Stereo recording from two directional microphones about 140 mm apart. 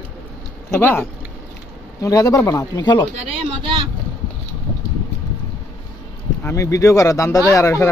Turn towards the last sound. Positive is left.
turn(degrees=20)  # may be behind; listen again after turning